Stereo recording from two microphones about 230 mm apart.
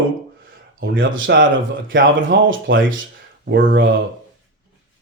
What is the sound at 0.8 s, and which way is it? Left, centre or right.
Speech, right.